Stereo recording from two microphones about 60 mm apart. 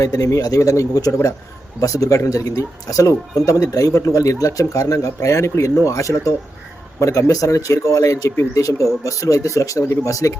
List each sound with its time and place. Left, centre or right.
0.0 s speech: left